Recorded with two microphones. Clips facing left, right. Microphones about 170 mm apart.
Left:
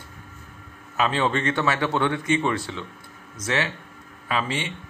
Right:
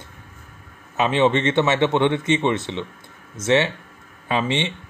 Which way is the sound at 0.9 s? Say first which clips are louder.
Right 5 dB; 20° right (ahead or behind).